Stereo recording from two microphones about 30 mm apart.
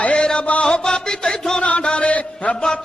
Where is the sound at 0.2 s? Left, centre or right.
Left.